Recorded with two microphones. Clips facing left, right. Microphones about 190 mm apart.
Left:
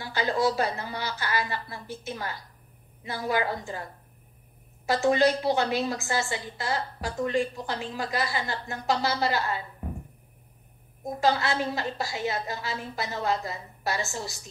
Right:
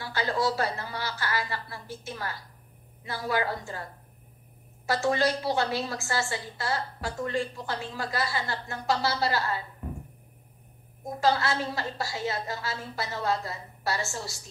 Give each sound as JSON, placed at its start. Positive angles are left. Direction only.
{"t": 0.0, "sound": "a woman's voice", "side_deg": 20}
{"t": 4.8, "sound": "a woman's voice", "side_deg": 20}
{"t": 11.1, "sound": "a woman's voice", "side_deg": 20}